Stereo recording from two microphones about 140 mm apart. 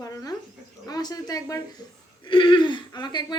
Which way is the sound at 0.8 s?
25° left (ahead or behind).